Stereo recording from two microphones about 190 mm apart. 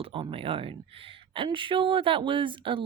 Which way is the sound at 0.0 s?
25° right (ahead or behind).